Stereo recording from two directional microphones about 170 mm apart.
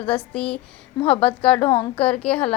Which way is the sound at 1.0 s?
35° left (ahead or behind).